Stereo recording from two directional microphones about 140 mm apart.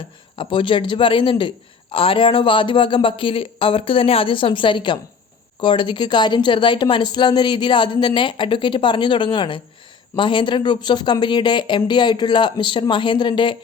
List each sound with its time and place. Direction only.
0.3 s a man's voice: 35° left (ahead or behind)